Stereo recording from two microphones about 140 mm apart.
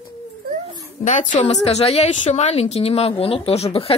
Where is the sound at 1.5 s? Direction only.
50° left (ahead or behind).